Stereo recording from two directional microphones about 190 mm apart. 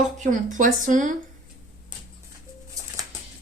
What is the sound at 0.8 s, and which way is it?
Speech, 40° right (ahead or behind).